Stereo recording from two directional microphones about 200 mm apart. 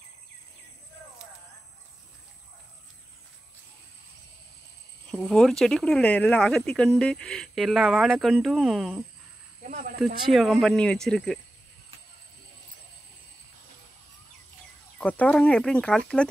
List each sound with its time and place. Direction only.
5.1 s speech: centre (ahead or behind)
9.7 s speech: 40° right (ahead or behind)
9.9 s speech: centre (ahead or behind)
15.0 s speech: 5° left (ahead or behind)